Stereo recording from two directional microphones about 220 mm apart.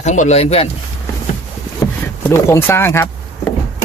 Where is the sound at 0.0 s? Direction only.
30° left (ahead or behind).